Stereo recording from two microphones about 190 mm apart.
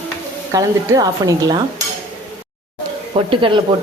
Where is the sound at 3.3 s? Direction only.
25° right (ahead or behind).